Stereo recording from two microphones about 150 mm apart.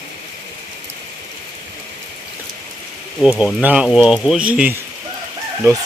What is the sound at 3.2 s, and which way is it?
Speech, 10° right (ahead or behind).